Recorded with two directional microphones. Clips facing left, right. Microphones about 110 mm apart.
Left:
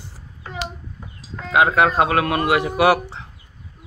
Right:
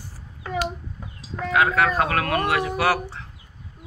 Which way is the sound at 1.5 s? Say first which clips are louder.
Left 4 dB; 20° left (ahead or behind).